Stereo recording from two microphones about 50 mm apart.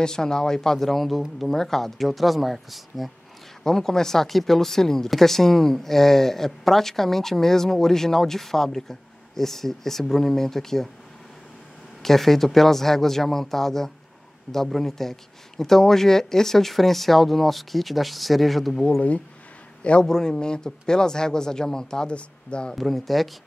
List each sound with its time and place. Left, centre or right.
0.0 s speech: centre
3.6 s speech: centre
12.0 s speech: centre
18.9 s a man's voice: left
22.8 s speech: centre